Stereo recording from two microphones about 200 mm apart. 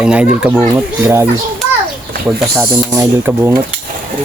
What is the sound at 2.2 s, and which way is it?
Speech, 15° right (ahead or behind).